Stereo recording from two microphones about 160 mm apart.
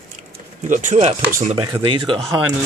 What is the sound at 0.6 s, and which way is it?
Speech, 50° right (ahead or behind).